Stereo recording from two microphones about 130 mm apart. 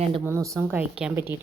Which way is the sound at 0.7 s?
10° right (ahead or behind).